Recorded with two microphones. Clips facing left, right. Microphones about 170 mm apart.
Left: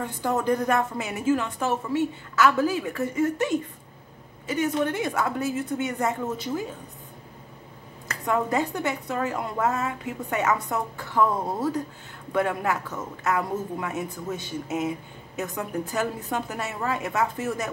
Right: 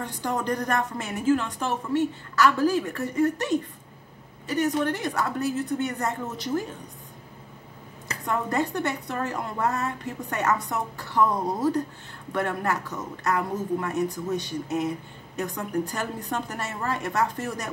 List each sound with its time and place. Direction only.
0.2 s a woman's voice: 5° left (ahead or behind)
4.6 s a woman's voice: 10° left (ahead or behind)
8.3 s a woman's voice: 10° left (ahead or behind)